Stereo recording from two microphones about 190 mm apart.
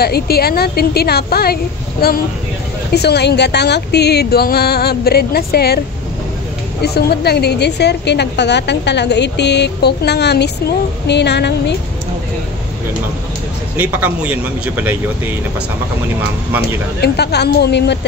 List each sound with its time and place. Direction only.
0.0 s a woman's voice: 55° left (ahead or behind)
6.8 s a woman's voice: 55° left (ahead or behind)
13.7 s speech: 10° right (ahead or behind)
17.0 s a woman's voice: 60° left (ahead or behind)